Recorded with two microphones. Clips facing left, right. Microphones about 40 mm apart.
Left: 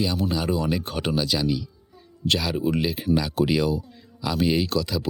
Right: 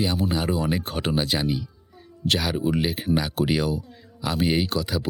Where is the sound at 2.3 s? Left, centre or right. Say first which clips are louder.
Even; right.